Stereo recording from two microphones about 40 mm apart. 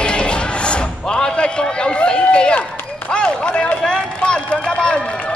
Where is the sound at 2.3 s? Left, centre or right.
Left.